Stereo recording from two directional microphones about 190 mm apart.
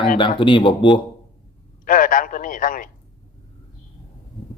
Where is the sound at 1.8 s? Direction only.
45° left (ahead or behind).